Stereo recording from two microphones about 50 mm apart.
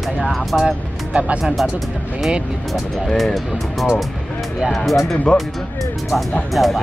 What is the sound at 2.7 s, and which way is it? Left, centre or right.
Speech, centre.